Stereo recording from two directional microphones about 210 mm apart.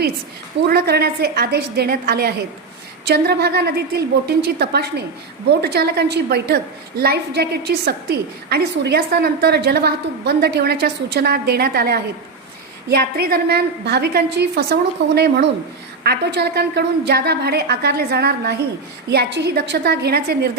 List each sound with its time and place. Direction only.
0.7 s a woman's voice: 50° right (ahead or behind)